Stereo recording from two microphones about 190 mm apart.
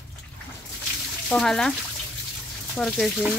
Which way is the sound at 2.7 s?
Centre (ahead or behind).